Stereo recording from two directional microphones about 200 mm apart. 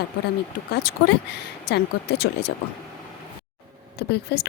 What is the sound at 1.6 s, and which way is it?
Speech, 55° left (ahead or behind).